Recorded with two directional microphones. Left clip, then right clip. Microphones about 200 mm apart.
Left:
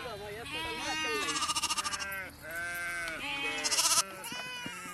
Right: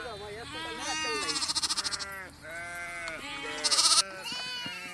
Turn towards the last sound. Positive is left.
turn(degrees=10)  # may be behind; listen again after turning